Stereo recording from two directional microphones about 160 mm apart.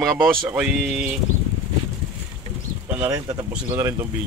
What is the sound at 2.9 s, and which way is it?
Speech, 15° right (ahead or behind).